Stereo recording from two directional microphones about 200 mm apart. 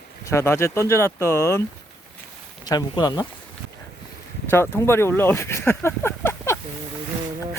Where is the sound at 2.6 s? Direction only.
20° left (ahead or behind).